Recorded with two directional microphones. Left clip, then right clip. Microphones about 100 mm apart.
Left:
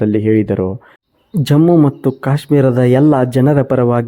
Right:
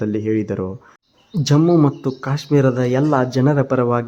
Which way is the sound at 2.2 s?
45° left (ahead or behind).